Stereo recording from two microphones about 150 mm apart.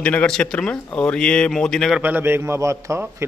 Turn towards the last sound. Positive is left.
turn(degrees=-20)  # may be behind; listen again after turning